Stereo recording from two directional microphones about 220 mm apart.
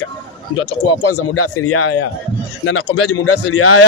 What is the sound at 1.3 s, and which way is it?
Speech, 85° left.